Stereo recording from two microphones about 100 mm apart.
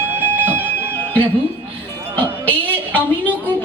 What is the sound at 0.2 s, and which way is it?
Music, 20° right (ahead or behind).